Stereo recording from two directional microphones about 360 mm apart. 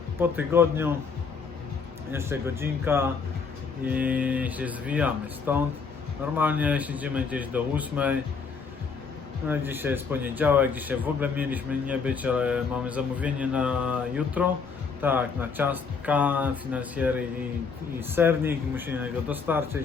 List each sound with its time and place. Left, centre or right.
0.2 s speech: centre
2.1 s a man's voice: centre
9.5 s a man's voice: centre